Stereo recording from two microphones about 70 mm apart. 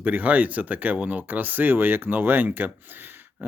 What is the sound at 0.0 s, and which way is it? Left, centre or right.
Speech, right.